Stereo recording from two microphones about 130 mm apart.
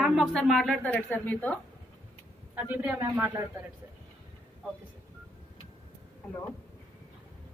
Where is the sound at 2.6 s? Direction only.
15° right (ahead or behind).